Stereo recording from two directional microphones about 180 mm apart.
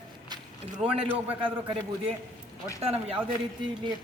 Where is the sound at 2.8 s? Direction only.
35° right (ahead or behind).